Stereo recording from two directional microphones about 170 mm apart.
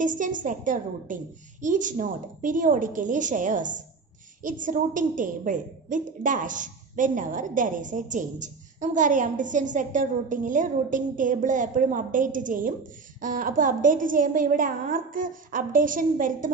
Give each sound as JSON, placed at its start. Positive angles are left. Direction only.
{"t": 0.0, "sound": "a woman's voice", "side_deg": -50}